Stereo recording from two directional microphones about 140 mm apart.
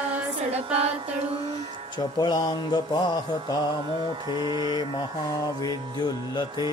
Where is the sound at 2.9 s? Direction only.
30° left (ahead or behind).